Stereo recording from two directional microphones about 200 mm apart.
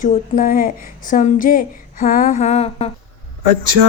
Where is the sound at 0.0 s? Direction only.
45° left (ahead or behind).